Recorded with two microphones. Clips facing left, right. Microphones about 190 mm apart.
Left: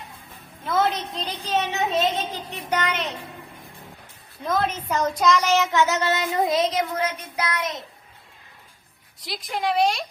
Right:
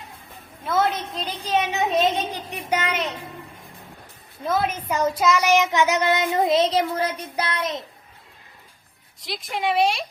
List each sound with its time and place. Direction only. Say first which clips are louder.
0.6 s a woman's voice: even; 5° right (ahead or behind)
4.4 s child singing: right 1 dB; 10° right (ahead or behind); by 7.8 s 30° right (ahead or behind)
9.2 s a woman's voice: right 1 dB; centre (ahead or behind)